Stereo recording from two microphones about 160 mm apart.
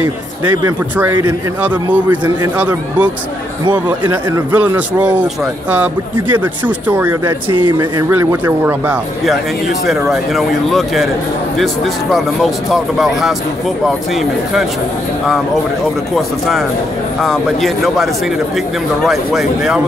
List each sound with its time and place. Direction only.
0.5 s speech: 25° right (ahead or behind)
1.6 s a man's voice: 10° right (ahead or behind)
9.8 s speech: centre (ahead or behind)
16.2 s speech: centre (ahead or behind)